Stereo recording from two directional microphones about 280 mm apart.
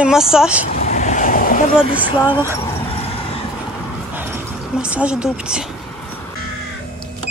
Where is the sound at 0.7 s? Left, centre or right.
Left.